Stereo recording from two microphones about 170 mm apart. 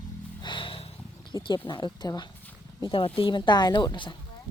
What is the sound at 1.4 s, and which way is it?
A woman's voice, 25° left (ahead or behind).